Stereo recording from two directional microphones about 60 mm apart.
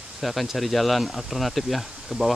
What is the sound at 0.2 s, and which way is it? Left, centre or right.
Speech, centre.